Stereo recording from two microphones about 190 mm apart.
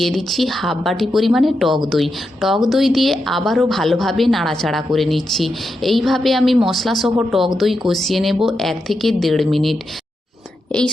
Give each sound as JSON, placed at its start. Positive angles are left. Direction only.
{"t": 0.0, "sound": "a woman's voice", "side_deg": 0}